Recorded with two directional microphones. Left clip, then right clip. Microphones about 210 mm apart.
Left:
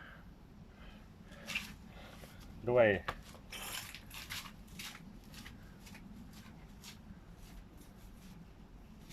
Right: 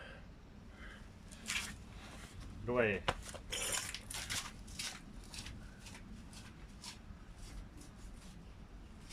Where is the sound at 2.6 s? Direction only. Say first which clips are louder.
Left 6 dB; 40° left (ahead or behind).